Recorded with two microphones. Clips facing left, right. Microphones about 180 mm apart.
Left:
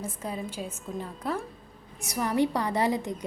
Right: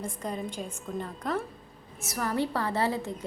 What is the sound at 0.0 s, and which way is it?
A woman's voice, 5° left (ahead or behind).